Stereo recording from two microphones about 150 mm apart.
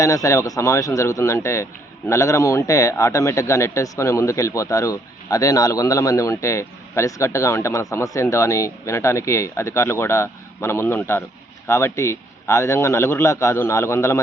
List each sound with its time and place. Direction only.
0.0 s a man's voice: 20° left (ahead or behind)